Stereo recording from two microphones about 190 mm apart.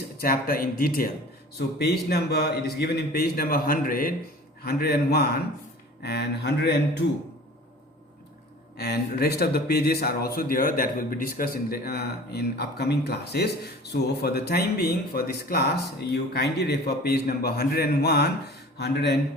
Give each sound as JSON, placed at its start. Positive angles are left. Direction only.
{"t": 0.2, "sound": "speech", "side_deg": 50}
{"t": 8.8, "sound": "speech", "side_deg": 55}